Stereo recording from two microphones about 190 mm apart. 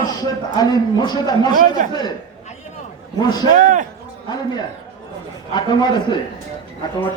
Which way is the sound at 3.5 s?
45° right (ahead or behind).